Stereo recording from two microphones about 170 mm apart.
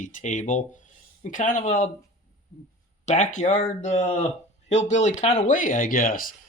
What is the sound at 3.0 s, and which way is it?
Speech, 45° left (ahead or behind).